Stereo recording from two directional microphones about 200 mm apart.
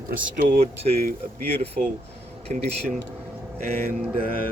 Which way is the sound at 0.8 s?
35° right (ahead or behind).